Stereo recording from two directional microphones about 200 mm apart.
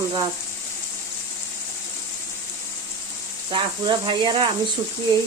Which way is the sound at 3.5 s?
25° right (ahead or behind).